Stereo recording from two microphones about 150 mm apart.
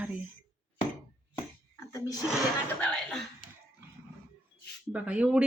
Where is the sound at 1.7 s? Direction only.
20° left (ahead or behind).